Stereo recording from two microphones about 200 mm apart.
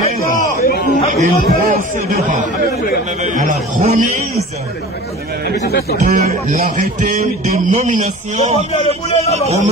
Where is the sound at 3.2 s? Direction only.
40° right (ahead or behind).